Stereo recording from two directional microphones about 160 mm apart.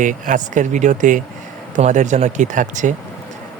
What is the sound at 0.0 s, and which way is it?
Speech, 55° right (ahead or behind).